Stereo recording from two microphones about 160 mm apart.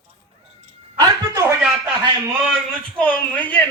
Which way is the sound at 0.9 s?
20° right (ahead or behind).